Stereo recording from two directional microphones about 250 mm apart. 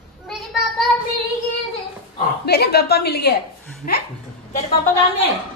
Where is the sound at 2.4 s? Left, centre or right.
Left.